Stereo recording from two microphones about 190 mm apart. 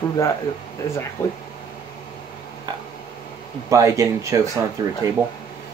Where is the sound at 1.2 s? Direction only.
10° left (ahead or behind).